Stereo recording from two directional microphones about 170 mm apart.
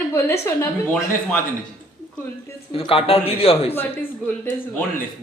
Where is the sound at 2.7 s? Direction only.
35° left (ahead or behind).